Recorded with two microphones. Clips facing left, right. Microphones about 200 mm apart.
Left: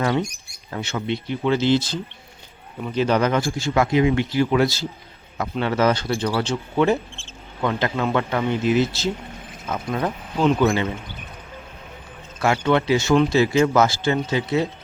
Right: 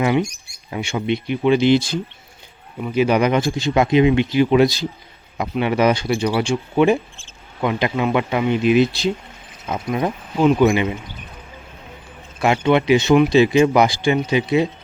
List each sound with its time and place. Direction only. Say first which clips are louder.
0.0 s speech: right 4 dB; 15° right (ahead or behind)
12.4 s speech: right 3 dB; 20° right (ahead or behind)